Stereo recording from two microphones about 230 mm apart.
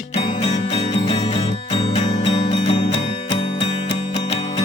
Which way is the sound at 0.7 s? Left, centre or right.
Left.